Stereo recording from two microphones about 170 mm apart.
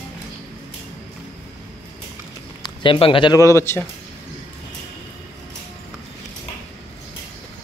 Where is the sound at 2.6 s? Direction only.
30° left (ahead or behind).